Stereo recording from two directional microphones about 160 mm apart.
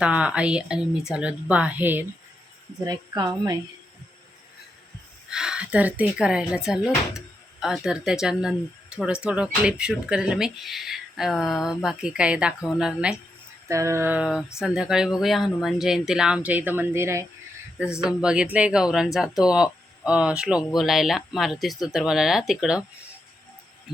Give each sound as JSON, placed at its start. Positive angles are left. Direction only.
{"t": 0.0, "sound": "a woman's voice", "side_deg": -5}
{"t": 2.8, "sound": "a woman's voice", "side_deg": -25}
{"t": 5.3, "sound": "speech", "side_deg": -5}
{"t": 13.7, "sound": "a woman's voice", "side_deg": -20}
{"t": 18.0, "sound": "speech", "side_deg": -5}